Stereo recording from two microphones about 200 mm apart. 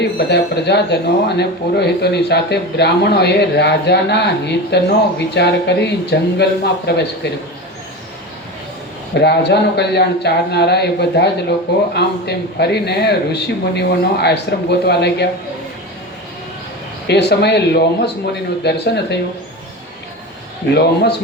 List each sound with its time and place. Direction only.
0.0 s speech: 55° left (ahead or behind)
9.1 s speech: 55° left (ahead or behind)
17.1 s speech: 55° left (ahead or behind)
20.7 s speech: 55° left (ahead or behind)